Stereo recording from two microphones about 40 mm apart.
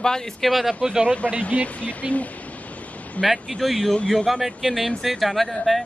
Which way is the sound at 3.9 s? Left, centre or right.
Left.